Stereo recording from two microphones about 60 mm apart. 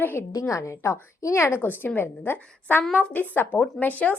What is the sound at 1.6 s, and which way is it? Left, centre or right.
Speech, left.